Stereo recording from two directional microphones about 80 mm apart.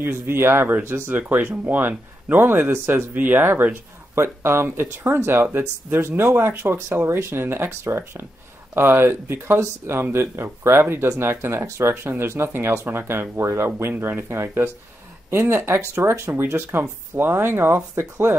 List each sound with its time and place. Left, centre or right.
0.0 s speech: right